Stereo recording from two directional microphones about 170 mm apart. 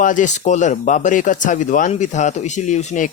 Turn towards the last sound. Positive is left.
turn(degrees=45)  # may be behind; listen again after turning